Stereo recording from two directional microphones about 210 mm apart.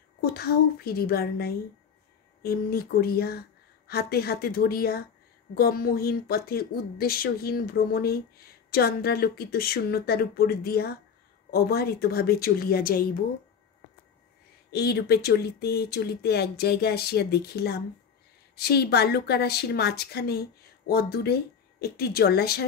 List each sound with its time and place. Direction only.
0.2 s a woman's voice: 45° left (ahead or behind)
14.7 s a woman's voice: 50° left (ahead or behind)